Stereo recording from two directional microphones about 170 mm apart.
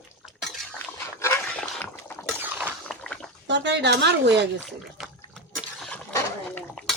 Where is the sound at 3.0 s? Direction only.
5° left (ahead or behind).